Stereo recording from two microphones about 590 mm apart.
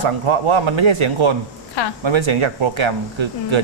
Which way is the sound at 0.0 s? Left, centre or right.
Right.